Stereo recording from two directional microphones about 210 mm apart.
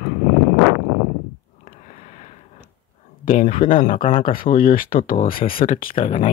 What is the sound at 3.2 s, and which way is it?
Speech, 35° left (ahead or behind).